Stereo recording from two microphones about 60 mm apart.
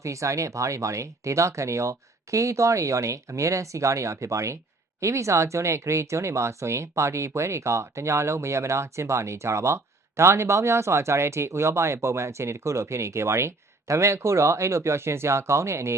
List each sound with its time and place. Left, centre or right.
0.0 s speech: right